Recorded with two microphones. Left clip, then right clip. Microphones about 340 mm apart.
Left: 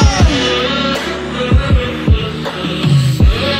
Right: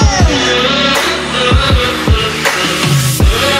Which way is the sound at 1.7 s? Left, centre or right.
Right.